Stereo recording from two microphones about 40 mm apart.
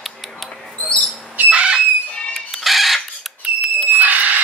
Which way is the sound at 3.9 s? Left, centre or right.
Right.